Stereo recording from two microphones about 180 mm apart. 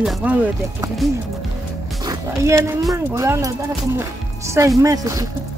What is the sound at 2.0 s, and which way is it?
Speech, 20° right (ahead or behind).